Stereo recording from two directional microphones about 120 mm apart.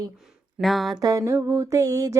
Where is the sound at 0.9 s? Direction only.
30° right (ahead or behind).